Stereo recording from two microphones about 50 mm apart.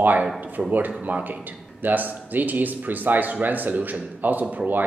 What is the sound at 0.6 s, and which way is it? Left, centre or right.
Speech, right.